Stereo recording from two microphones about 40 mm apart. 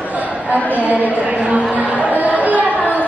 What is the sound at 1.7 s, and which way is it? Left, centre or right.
Music, right.